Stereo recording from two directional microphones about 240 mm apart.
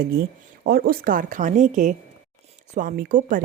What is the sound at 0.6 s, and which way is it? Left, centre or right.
A woman's voice, right.